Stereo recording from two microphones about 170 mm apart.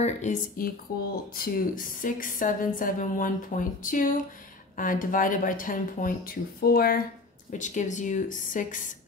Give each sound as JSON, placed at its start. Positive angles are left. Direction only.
{"t": 0.0, "sound": "speech", "side_deg": 45}
{"t": 7.5, "sound": "speech", "side_deg": 45}